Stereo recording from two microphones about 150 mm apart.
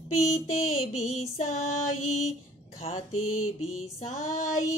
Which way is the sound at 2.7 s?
50° left (ahead or behind).